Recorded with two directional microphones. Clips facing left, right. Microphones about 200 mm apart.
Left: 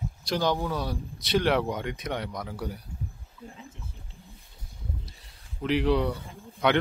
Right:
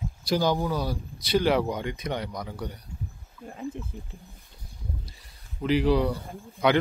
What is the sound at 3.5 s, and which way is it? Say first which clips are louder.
Speech: right 12 dB; 55° right (ahead or behind).